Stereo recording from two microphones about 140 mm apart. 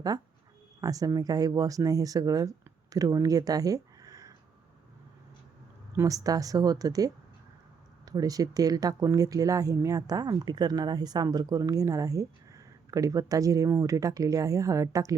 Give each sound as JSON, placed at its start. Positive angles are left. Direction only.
{"t": 0.1, "sound": "speech", "side_deg": -25}
{"t": 6.0, "sound": "speech", "side_deg": -25}